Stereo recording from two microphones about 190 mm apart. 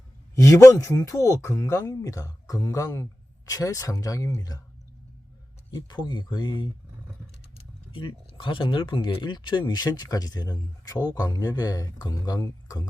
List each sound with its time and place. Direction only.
0.3 s speech: 15° left (ahead or behind)
5.7 s speech: 25° left (ahead or behind)
7.9 s speech: 25° left (ahead or behind)